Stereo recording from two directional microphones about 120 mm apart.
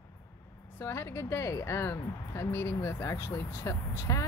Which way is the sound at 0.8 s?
20° left (ahead or behind).